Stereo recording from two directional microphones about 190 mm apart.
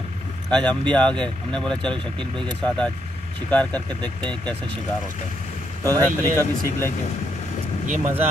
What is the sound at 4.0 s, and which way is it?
Speech, 25° right (ahead or behind).